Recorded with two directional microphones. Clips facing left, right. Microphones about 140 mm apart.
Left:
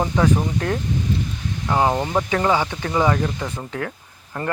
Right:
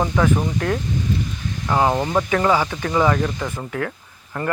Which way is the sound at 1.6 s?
20° left (ahead or behind).